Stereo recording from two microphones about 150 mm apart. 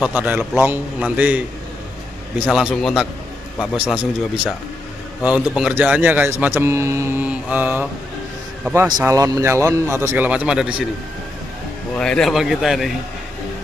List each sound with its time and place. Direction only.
0.0 s speech: 10° right (ahead or behind)
5.6 s speech: 10° right (ahead or behind)
9.0 s speech: 25° right (ahead or behind); by 10.9 s 5° right (ahead or behind)
12.0 s speech: 5° left (ahead or behind)